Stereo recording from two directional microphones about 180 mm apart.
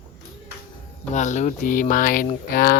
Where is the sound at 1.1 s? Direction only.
40° left (ahead or behind).